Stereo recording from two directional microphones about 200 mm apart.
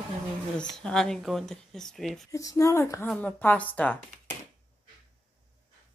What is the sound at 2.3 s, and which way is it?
A woman's voice, 15° left (ahead or behind).